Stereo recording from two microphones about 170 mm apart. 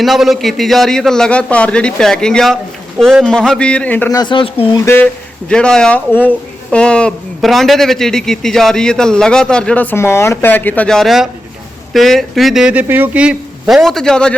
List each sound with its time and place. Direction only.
0.0 s speech: centre (ahead or behind)
4.1 s speech: 25° left (ahead or behind)
4.7 s speech: 15° left (ahead or behind)